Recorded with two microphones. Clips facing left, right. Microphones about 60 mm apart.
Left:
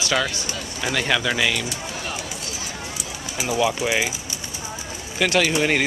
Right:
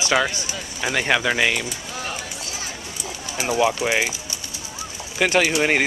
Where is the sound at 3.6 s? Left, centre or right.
Centre.